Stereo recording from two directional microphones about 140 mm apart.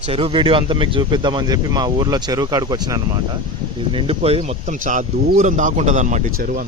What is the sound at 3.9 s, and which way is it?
Speech, 45° right (ahead or behind).